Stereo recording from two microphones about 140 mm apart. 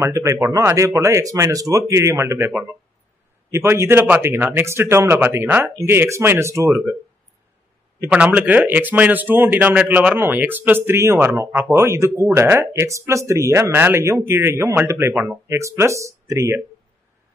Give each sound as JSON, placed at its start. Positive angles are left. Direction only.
{"t": 0.0, "sound": "speech", "side_deg": -20}
{"t": 3.5, "sound": "a man's voice", "side_deg": -20}
{"t": 8.0, "sound": "a man's voice", "side_deg": -10}